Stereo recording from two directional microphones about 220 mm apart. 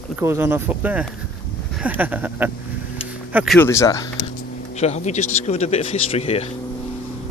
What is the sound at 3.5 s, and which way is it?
Speech, 10° left (ahead or behind).